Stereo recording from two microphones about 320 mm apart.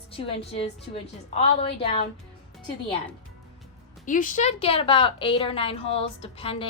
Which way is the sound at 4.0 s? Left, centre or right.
Left.